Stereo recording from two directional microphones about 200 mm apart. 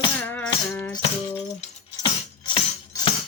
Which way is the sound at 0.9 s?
30° left (ahead or behind).